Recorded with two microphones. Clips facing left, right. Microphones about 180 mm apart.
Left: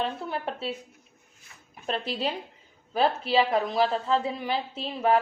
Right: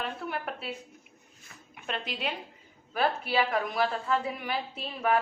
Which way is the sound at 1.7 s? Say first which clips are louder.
Left 5 dB; 35° left (ahead or behind).